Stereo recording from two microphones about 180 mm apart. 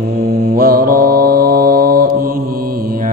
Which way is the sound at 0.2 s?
55° right (ahead or behind).